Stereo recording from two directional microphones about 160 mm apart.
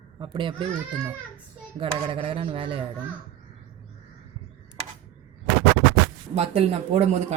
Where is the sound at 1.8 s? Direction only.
35° right (ahead or behind).